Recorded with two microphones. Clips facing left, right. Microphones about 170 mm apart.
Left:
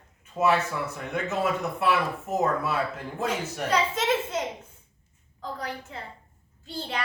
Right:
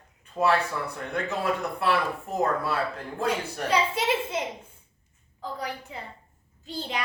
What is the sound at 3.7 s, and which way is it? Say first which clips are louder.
Speech: even; 10° right (ahead or behind).